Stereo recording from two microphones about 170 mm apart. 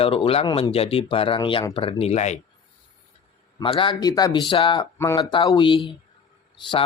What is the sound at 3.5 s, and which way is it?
Speech, 30° left (ahead or behind).